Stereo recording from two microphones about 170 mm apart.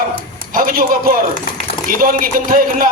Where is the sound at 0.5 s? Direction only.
55° right (ahead or behind).